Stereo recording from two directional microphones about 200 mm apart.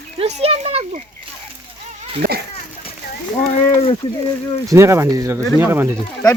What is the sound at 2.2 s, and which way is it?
Speech, 45° right (ahead or behind).